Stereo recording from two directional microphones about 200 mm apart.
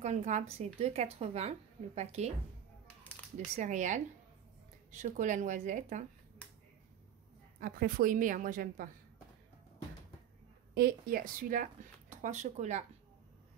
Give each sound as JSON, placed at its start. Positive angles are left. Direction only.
{"t": 0.0, "sound": "speech", "side_deg": -35}
{"t": 3.3, "sound": "speech", "side_deg": -35}
{"t": 7.6, "sound": "a woman's voice", "side_deg": -45}
{"t": 10.7, "sound": "speech", "side_deg": -50}